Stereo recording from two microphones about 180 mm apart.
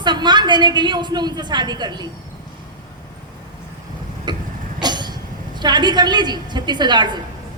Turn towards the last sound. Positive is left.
turn(degrees=-25)  # may be behind; listen again after turning